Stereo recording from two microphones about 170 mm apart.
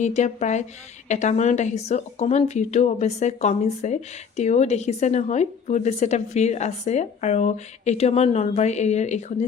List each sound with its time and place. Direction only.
0.0 s a woman's voice: 45° left (ahead or behind)